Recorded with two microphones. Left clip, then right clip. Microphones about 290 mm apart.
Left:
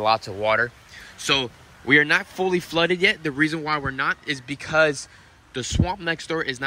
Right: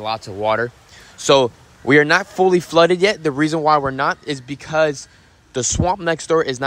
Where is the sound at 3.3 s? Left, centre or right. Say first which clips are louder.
Right 8 dB; centre.